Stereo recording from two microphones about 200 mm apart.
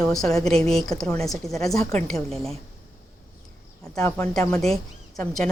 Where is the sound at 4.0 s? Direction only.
5° left (ahead or behind).